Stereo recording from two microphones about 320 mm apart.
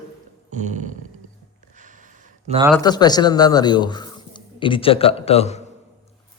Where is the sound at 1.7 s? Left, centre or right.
Right.